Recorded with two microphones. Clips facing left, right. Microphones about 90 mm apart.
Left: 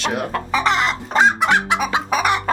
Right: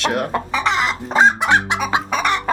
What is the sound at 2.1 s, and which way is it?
Chicken, 5° left (ahead or behind).